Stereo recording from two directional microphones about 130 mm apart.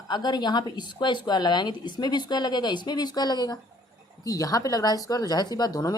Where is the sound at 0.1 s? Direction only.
35° left (ahead or behind).